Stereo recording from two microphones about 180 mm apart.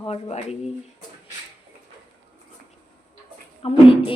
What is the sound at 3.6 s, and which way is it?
Speech, 30° left (ahead or behind).